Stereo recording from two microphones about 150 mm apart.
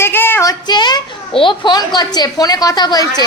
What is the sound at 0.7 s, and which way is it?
Speech, 30° left (ahead or behind).